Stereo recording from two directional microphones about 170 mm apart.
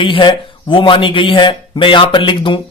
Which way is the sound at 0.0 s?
30° left (ahead or behind).